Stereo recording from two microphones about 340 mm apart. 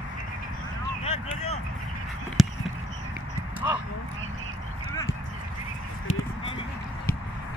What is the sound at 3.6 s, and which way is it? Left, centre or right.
Speech, centre.